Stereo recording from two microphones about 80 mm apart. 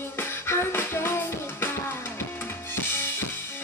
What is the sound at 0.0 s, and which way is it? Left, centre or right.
Music, left.